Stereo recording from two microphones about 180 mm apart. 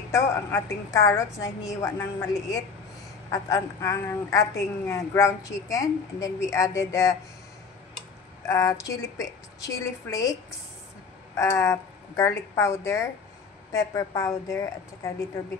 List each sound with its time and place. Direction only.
0.1 s a woman's voice: 15° left (ahead or behind)
8.5 s a woman's voice: 15° left (ahead or behind)
11.3 s a woman's voice: 15° left (ahead or behind)